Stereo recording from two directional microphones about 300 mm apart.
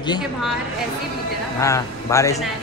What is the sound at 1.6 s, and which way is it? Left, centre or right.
Speech, centre.